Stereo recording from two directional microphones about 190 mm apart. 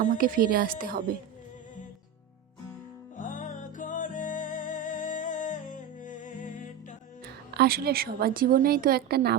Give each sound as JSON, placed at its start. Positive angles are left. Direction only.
{"t": 0.0, "sound": "a woman's voice", "side_deg": -45}
{"t": 3.2, "sound": "music", "side_deg": 45}
{"t": 7.5, "sound": "a woman's voice", "side_deg": -55}